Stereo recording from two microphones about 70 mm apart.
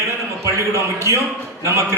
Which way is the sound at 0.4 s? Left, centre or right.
Right.